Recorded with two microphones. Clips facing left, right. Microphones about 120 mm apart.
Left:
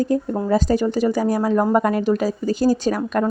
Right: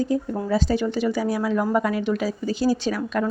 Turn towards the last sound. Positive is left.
turn(degrees=45)  # may be behind; listen again after turning